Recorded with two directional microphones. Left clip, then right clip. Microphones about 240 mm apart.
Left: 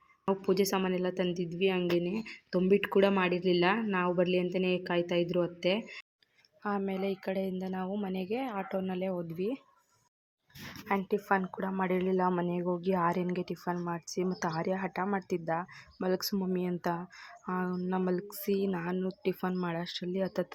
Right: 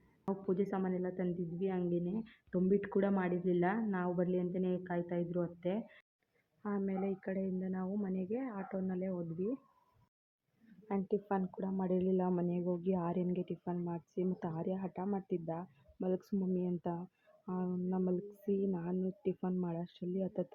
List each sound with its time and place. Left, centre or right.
0.4 s a woman's voice: centre
10.8 s a woman's voice: centre
11.9 s speech: left
12.1 s a woman's voice: centre